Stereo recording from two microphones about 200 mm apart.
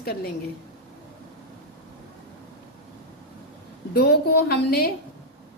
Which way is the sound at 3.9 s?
55° left (ahead or behind).